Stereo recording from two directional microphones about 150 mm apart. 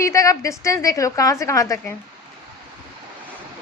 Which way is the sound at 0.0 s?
20° left (ahead or behind).